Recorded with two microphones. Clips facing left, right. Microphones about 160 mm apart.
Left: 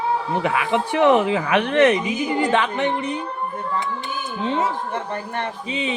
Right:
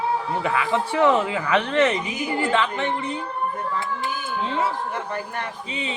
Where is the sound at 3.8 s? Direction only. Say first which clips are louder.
Left 1 dB; 20° left (ahead or behind).